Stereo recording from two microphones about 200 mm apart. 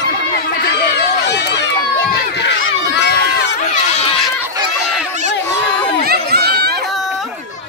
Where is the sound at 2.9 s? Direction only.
55° left (ahead or behind).